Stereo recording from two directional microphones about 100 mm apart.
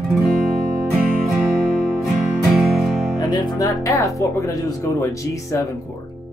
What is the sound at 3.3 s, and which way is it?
Speech, 45° left (ahead or behind).